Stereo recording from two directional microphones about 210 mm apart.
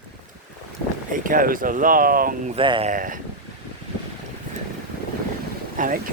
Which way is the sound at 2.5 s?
25° right (ahead or behind).